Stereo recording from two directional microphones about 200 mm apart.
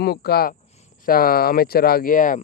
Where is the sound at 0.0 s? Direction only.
50° left (ahead or behind).